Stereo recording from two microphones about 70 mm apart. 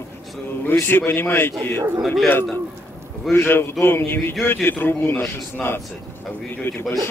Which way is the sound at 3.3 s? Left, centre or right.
Left.